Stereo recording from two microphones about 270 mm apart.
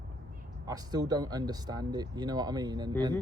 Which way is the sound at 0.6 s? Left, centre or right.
Centre.